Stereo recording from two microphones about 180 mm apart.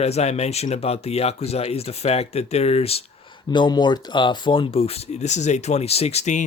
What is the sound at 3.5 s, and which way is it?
Speech, 25° left (ahead or behind).